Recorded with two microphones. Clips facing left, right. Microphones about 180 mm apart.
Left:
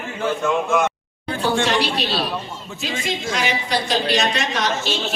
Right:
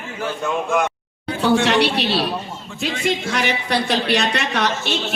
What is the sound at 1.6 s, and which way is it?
A woman's voice, 65° right (ahead or behind).